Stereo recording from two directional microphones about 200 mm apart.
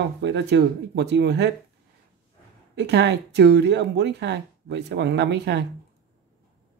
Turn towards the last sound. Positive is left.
turn(degrees=-55)  # may be behind; listen again after turning